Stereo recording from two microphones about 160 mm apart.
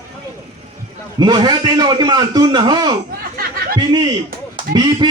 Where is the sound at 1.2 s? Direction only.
25° right (ahead or behind).